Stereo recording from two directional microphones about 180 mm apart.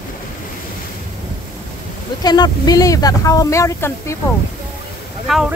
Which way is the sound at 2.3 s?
20° left (ahead or behind).